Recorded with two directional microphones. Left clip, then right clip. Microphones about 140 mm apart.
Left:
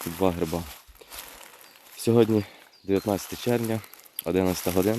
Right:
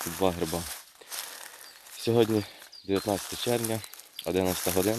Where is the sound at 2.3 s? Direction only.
40° left (ahead or behind).